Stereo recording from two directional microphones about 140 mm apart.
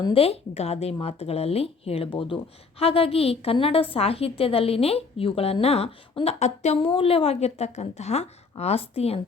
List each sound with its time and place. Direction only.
0.1 s a woman's voice: 45° left (ahead or behind)